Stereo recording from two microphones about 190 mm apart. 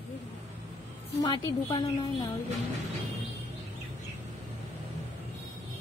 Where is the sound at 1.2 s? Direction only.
25° left (ahead or behind).